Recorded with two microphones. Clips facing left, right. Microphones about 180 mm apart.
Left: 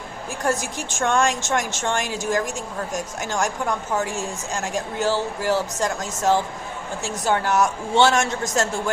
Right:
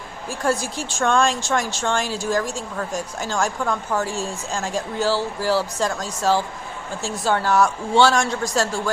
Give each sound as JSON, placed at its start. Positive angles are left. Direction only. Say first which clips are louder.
{"t": 0.3, "sound": "speech", "louder": "right 2 dB", "side_deg": 20}